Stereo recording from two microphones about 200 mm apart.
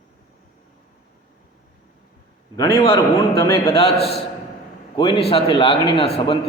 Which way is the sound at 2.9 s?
15° left (ahead or behind).